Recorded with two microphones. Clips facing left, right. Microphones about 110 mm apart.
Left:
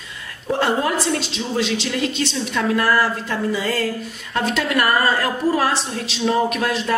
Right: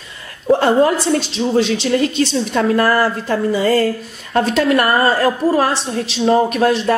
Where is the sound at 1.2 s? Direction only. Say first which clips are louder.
Right 7 dB; 40° right (ahead or behind).